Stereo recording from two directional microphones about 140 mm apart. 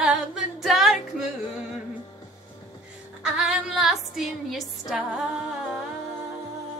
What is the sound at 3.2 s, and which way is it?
Music, 5° right (ahead or behind).